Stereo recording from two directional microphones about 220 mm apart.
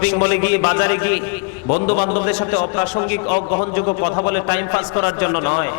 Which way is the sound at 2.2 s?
10° left (ahead or behind).